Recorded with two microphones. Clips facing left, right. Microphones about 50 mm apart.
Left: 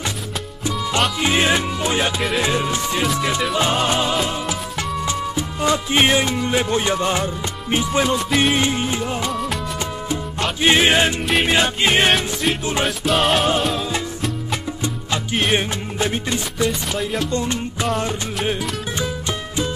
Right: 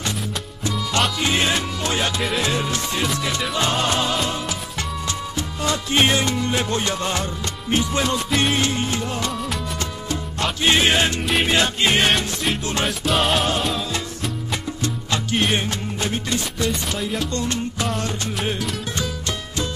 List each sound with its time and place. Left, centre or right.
0.7 s music: centre
5.0 s music: centre
8.3 s music: centre
8.5 s music: centre
9.3 s music: centre
10.6 s music: centre
12.1 s music: centre
15.5 s music: centre
16.6 s music: centre
17.3 s music: centre